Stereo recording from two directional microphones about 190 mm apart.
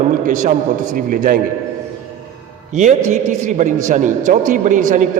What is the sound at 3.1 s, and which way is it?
A man's voice, 40° right (ahead or behind).